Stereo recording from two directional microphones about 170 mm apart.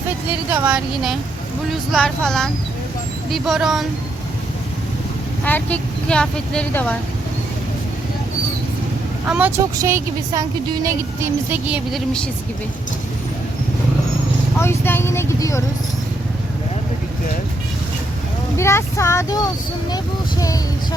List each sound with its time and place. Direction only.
0.5 s speech: 10° right (ahead or behind)
1.9 s speech: 5° left (ahead or behind)
5.5 s speech: 10° left (ahead or behind)
9.2 s speech: 5° right (ahead or behind)
14.6 s speech: 15° left (ahead or behind)
18.5 s speech: 15° left (ahead or behind)